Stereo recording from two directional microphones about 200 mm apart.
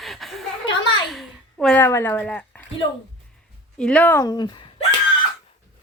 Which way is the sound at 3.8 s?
5° left (ahead or behind).